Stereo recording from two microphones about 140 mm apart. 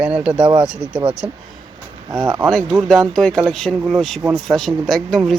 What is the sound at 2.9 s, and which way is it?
Speech, 5° left (ahead or behind).